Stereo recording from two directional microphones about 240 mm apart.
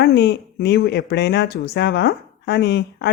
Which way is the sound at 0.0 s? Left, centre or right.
Left.